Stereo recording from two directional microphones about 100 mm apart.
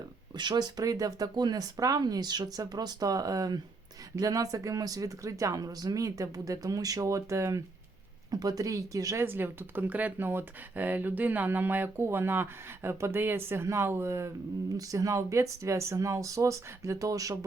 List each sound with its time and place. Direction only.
0.3 s speech: 45° right (ahead or behind); by 7.6 s 30° right (ahead or behind)
8.3 s speech: 40° right (ahead or behind)
9.2 s speech: 20° right (ahead or behind)